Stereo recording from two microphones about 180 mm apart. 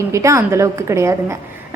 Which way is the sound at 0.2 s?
15° right (ahead or behind).